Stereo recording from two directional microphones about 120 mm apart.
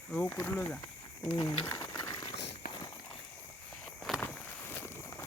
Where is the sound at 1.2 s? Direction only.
30° left (ahead or behind).